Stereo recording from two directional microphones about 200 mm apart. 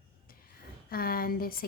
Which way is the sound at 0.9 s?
45° left (ahead or behind).